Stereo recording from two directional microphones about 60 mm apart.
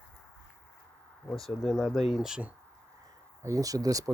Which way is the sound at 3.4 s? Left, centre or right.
Right.